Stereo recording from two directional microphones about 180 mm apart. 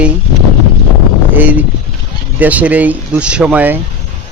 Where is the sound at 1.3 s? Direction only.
10° right (ahead or behind).